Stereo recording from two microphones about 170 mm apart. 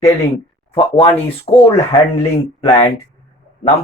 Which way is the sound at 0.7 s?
30° left (ahead or behind).